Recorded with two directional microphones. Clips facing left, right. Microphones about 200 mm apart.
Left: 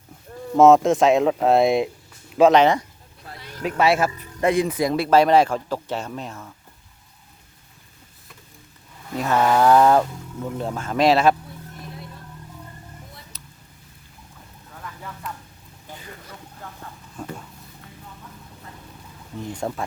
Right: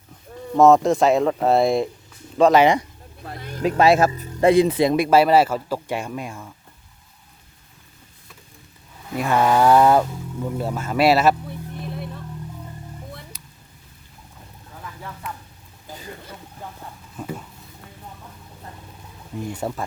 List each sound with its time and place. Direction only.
0.5 s speech: centre (ahead or behind)
2.6 s speech: 15° right (ahead or behind)
3.3 s vehicle: 50° right (ahead or behind)
3.6 s speech: 35° right (ahead or behind)
5.0 s speech: 5° right (ahead or behind)
9.0 s speech: 10° right (ahead or behind)
13.3 s a sound: 10° right (ahead or behind)
14.8 s a sound: 5° right (ahead or behind)
17.2 s a sound: 5° right (ahead or behind)
19.5 s speech: 5° right (ahead or behind)